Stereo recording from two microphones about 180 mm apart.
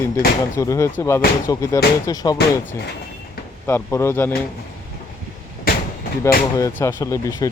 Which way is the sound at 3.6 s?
15° left (ahead or behind).